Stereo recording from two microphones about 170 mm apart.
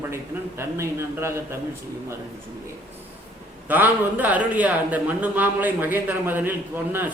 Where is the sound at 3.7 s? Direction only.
10° right (ahead or behind).